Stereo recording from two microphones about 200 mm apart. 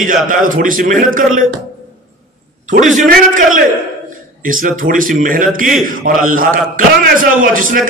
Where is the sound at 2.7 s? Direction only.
40° right (ahead or behind).